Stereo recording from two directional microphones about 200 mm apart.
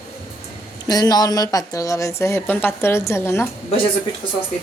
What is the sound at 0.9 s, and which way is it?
A woman's voice, 20° left (ahead or behind).